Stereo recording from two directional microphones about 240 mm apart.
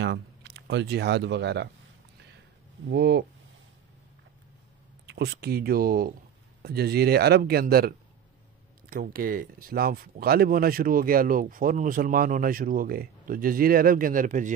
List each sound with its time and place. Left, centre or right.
0.0 s speech: right
2.9 s speech: right
5.0 s speech: right
8.9 s speech: right